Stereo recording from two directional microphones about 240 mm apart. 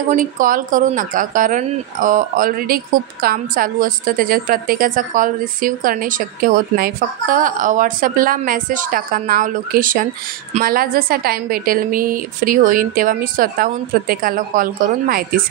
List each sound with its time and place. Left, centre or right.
0.1 s speech: right